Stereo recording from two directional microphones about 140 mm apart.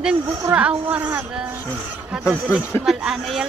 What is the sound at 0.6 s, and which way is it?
Speech, 10° right (ahead or behind).